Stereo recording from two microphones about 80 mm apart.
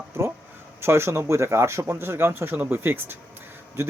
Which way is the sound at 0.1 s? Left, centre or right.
Right.